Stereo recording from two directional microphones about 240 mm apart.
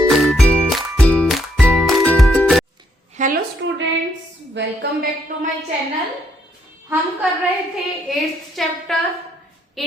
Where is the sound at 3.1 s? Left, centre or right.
Right.